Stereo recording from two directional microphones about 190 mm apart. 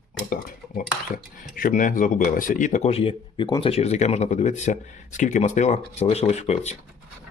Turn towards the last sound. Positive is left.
turn(degrees=35)  # may be behind; listen again after turning